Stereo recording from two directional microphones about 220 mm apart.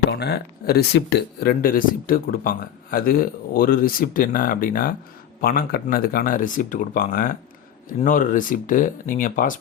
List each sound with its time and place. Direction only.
0.1 s speech: 50° left (ahead or behind)